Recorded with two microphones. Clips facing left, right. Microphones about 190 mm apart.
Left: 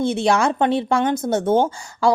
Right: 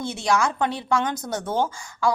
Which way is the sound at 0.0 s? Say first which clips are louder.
Left 6 dB; 55° left (ahead or behind).